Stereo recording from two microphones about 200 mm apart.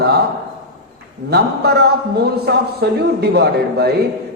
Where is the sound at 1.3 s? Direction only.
55° right (ahead or behind).